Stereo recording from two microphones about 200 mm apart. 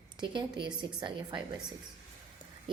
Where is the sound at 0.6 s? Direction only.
25° right (ahead or behind).